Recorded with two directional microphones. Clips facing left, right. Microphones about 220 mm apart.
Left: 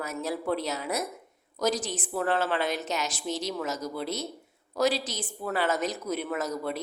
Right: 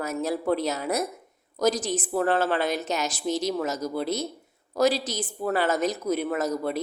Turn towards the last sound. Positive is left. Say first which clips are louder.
# right 4 dB
turn(degrees=-40)  # may be behind; listen again after turning